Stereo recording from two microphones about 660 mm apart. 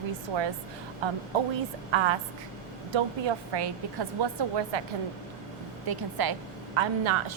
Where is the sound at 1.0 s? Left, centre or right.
Right.